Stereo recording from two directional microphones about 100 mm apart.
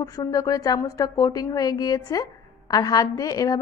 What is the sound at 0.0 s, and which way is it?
A woman's voice, 35° left (ahead or behind).